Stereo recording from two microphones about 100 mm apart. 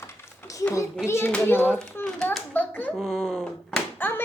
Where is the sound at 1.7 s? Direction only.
20° left (ahead or behind).